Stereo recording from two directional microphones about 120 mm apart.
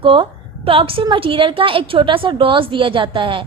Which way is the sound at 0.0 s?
50° right (ahead or behind).